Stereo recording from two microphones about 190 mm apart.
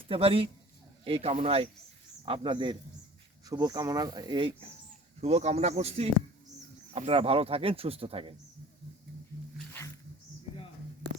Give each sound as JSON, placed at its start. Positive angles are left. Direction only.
{"t": 0.1, "sound": "speech", "side_deg": -30}